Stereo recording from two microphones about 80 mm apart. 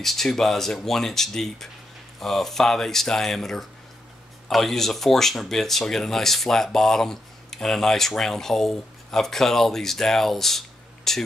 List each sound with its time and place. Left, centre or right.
0.0 s speech: centre